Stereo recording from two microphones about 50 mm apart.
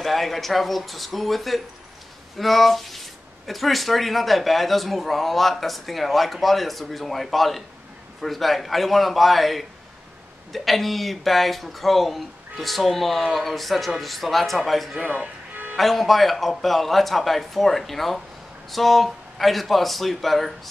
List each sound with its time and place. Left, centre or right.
0.0 s speech: centre
15.0 s speech: right
15.7 s speech: centre